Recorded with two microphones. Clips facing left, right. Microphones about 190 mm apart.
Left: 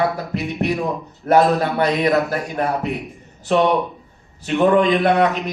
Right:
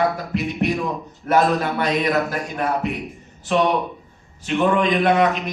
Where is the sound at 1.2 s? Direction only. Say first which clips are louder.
Left 3 dB; 40° left (ahead or behind).